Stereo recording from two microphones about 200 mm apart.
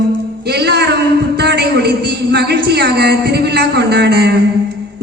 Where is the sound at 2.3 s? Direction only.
55° right (ahead or behind).